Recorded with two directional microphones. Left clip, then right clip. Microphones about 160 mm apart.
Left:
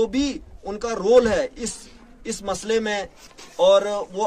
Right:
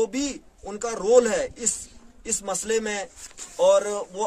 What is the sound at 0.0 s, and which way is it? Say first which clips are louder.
A man's voice: left 3 dB; 15° right (ahead or behind).